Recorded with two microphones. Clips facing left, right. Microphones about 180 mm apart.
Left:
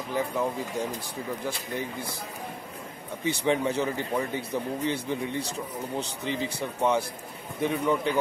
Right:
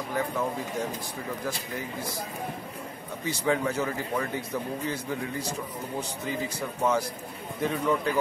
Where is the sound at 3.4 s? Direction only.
20° left (ahead or behind).